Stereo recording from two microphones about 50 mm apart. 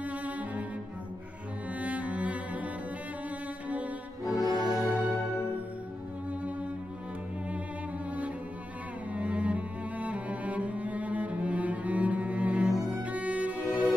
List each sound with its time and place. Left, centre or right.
0.0 s cello: right
1.8 s cello: right
4.3 s music: centre
9.1 s cello: right